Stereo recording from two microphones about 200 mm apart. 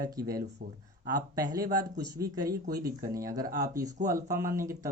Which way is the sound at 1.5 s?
20° right (ahead or behind).